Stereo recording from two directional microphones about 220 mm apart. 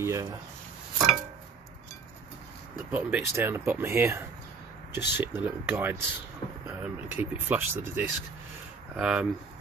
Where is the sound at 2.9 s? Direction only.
5° right (ahead or behind).